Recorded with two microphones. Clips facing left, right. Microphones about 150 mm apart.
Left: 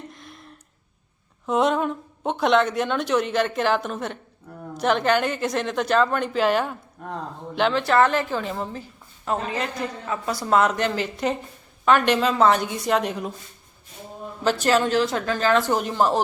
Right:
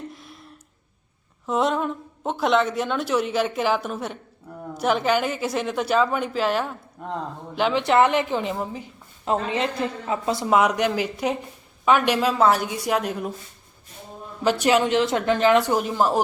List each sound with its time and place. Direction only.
0.1 s a sound: centre (ahead or behind)
1.5 s a woman's voice: centre (ahead or behind)
7.8 s a woman's voice: 15° right (ahead or behind)
9.2 s a woman's voice: 25° right (ahead or behind)
10.5 s a woman's voice: 10° right (ahead or behind)
14.4 s a woman's voice: 15° right (ahead or behind)